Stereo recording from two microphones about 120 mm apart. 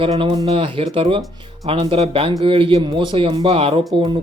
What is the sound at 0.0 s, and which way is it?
Speech, 45° right (ahead or behind).